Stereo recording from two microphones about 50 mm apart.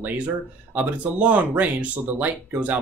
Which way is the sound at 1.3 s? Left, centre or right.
Right.